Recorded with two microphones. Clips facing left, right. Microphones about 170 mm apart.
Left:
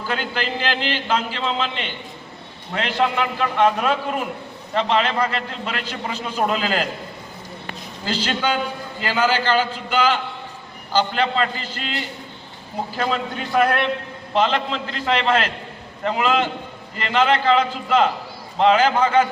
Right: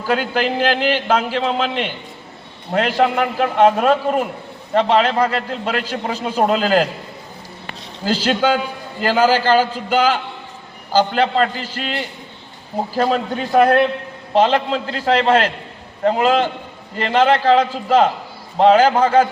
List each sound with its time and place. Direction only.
0.1 s a man's voice: 50° right (ahead or behind)
8.0 s a man's voice: 50° right (ahead or behind)
13.0 s a man's voice: 40° right (ahead or behind)